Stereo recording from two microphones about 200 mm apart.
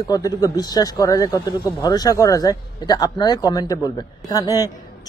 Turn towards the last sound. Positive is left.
turn(degrees=20)  # may be behind; listen again after turning